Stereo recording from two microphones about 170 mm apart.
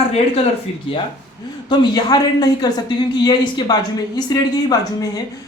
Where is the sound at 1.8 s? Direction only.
25° left (ahead or behind).